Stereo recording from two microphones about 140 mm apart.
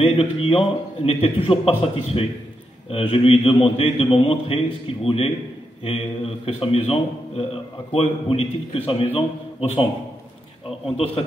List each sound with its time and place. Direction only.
0.0 s a man's voice: 40° left (ahead or behind)